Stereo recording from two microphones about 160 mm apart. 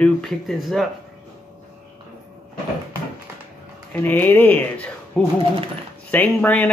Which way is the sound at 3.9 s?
10° left (ahead or behind).